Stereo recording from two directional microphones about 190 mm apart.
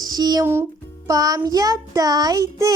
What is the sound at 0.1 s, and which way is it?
A child's voice, 20° right (ahead or behind).